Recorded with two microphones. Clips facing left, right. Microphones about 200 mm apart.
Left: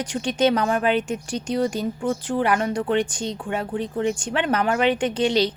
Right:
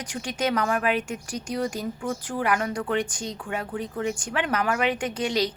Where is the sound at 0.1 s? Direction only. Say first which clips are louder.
Left 6 dB; 30° left (ahead or behind).